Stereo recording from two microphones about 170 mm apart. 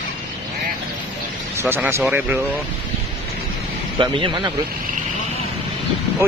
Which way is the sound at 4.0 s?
30° right (ahead or behind).